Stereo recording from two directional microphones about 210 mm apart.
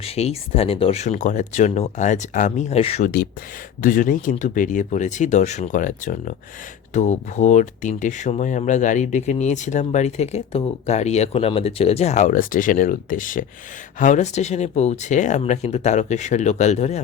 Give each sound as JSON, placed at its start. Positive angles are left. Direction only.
{"t": 0.0, "sound": "speech", "side_deg": 30}
{"t": 3.8, "sound": "speech", "side_deg": 40}